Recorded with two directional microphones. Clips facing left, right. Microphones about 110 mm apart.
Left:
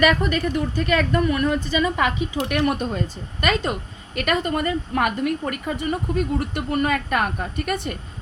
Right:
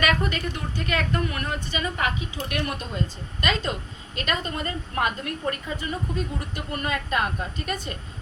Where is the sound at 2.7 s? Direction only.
50° left (ahead or behind).